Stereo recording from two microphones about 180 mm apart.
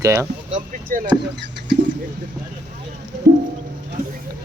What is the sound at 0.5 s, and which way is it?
Speech, 45° right (ahead or behind).